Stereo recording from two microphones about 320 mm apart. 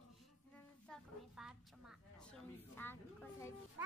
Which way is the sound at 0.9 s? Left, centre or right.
Centre.